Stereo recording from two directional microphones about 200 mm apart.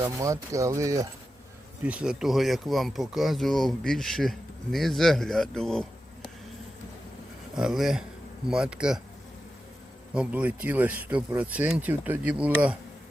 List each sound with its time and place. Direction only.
0.0 s speech: 15° right (ahead or behind); by 5.8 s 5° left (ahead or behind)
7.5 s speech: 5° right (ahead or behind)
10.2 s speech: 5° right (ahead or behind)